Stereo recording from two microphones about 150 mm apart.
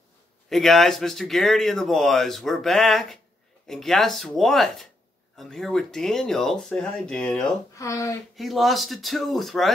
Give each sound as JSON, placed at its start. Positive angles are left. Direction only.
{"t": 0.5, "sound": "speech", "side_deg": 0}
{"t": 7.7, "sound": "speech", "side_deg": 20}
{"t": 8.4, "sound": "speech", "side_deg": 0}